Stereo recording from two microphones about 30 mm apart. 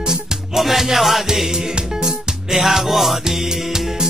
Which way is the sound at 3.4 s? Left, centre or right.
Centre.